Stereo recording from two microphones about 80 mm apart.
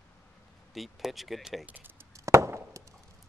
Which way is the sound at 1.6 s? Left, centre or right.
Right.